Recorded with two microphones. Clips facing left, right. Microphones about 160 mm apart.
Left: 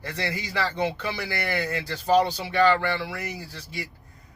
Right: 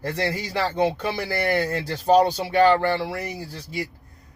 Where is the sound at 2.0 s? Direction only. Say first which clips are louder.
Right 4 dB; 45° right (ahead or behind).